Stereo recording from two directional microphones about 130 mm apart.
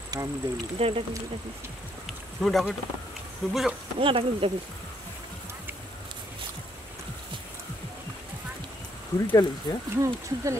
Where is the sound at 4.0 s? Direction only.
45° right (ahead or behind).